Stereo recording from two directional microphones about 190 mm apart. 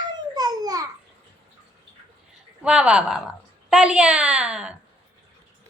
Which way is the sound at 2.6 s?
5° right (ahead or behind).